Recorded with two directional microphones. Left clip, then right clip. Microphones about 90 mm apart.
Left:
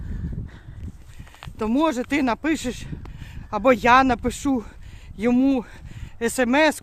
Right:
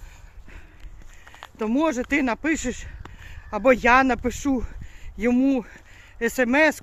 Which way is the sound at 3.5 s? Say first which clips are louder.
Left 1 dB; 50° left (ahead or behind).